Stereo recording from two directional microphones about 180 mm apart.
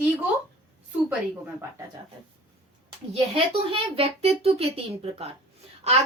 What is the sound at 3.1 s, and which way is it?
Speech, 30° right (ahead or behind).